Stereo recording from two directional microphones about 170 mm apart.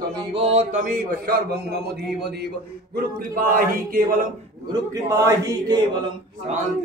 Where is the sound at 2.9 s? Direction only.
55° right (ahead or behind).